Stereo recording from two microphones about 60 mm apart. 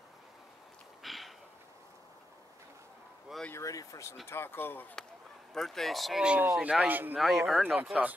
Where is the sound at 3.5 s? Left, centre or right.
Left.